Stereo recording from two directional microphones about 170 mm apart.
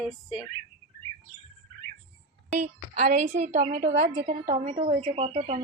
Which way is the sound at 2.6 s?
45° right (ahead or behind).